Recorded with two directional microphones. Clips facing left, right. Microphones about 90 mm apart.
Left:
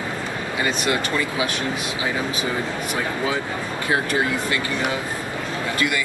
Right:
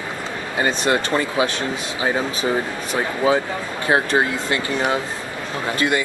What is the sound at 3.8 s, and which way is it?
Speech, 30° right (ahead or behind).